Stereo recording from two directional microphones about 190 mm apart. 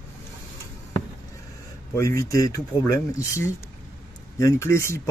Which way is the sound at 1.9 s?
15° left (ahead or behind).